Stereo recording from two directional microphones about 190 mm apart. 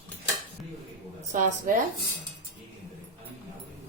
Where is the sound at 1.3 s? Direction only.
45° right (ahead or behind).